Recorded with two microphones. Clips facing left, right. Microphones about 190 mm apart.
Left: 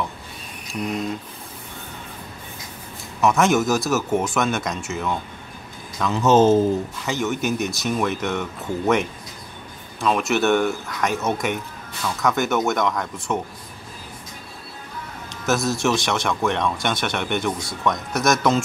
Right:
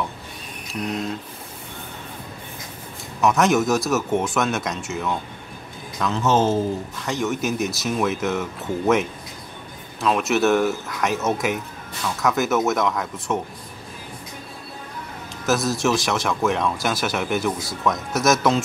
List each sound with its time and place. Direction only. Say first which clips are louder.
3.2 s speech: even; centre (ahead or behind)
6.2 s speech: left 5 dB; 20° left (ahead or behind)
7.1 s speech: even; centre (ahead or behind)
15.4 s speech: even; centre (ahead or behind)